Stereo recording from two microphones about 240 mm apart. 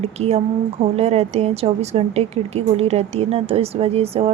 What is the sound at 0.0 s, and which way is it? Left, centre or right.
A woman's voice, right.